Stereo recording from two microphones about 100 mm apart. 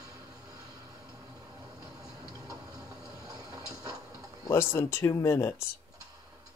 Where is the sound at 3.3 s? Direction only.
40° right (ahead or behind).